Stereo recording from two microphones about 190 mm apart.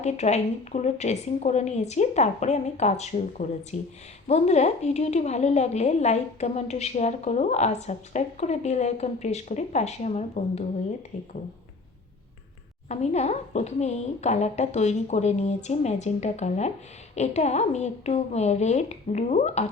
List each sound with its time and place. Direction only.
0.0 s a woman's voice: 35° left (ahead or behind)
12.9 s a woman's voice: 35° left (ahead or behind)